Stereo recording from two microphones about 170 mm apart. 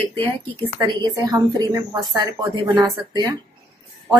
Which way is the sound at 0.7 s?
25° right (ahead or behind).